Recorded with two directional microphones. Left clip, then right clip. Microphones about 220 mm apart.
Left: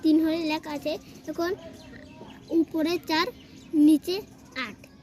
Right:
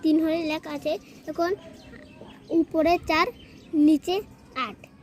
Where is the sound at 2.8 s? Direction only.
30° right (ahead or behind).